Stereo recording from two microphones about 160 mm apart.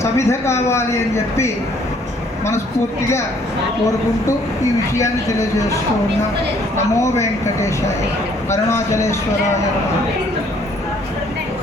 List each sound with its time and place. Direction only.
0.0 s speech: 15° left (ahead or behind)
6.9 s speech: 20° left (ahead or behind)